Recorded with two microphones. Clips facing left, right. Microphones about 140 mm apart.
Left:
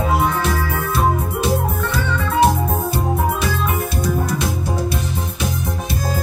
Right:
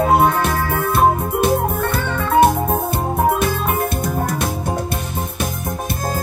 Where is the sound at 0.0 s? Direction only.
50° right (ahead or behind).